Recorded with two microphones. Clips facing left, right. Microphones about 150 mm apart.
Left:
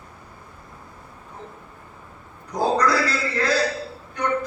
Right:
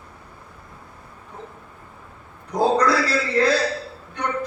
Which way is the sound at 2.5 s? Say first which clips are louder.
Right 2 dB; 30° right (ahead or behind).